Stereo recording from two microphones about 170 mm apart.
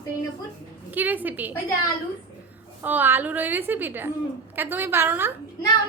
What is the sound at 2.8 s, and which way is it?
A woman's voice, 10° right (ahead or behind).